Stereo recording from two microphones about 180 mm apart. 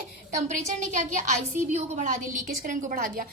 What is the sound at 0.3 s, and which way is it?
A woman's voice, 50° right (ahead or behind).